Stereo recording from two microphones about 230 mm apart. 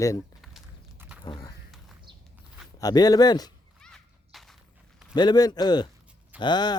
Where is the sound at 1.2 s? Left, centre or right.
Centre.